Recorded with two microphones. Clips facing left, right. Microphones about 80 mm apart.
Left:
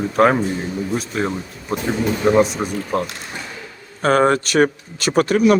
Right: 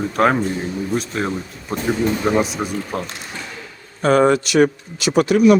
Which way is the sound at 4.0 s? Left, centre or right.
Left.